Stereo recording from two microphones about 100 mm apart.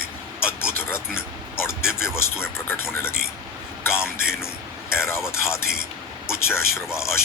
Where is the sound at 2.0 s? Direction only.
25° left (ahead or behind).